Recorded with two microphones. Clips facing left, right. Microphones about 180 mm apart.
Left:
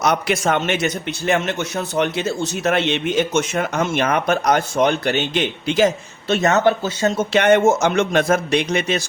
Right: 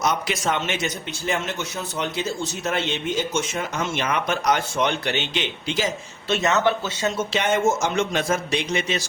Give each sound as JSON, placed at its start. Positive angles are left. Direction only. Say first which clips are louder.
{"t": 0.0, "sound": "a man's voice", "louder": "left 5 dB", "side_deg": 65}
{"t": 7.3, "sound": "a man's voice", "louder": "left 8 dB", "side_deg": 65}